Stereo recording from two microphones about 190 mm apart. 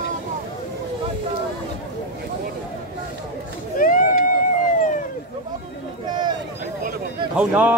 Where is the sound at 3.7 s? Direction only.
45° left (ahead or behind).